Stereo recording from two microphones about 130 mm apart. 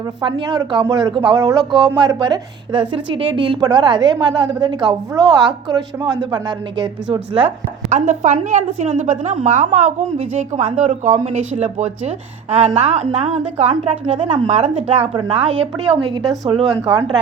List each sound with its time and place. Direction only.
0.2 s a woman's voice: 35° right (ahead or behind)
7.9 s a woman's voice: 65° right (ahead or behind); by 17.0 s 40° right (ahead or behind)